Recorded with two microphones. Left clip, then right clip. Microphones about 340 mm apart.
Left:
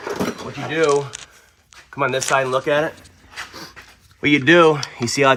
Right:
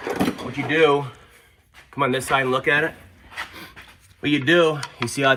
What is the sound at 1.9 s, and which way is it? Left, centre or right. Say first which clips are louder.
Speech: left 2 dB; centre.